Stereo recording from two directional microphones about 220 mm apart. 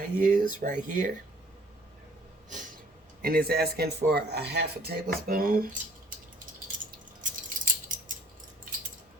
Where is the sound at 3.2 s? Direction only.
45° right (ahead or behind).